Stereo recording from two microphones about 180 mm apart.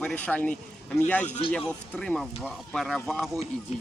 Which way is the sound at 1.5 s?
5° left (ahead or behind).